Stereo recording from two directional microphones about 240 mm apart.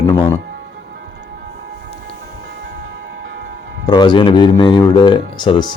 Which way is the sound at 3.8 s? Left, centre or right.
Centre.